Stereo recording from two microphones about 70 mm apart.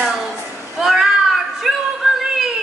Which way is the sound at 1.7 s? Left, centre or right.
Centre.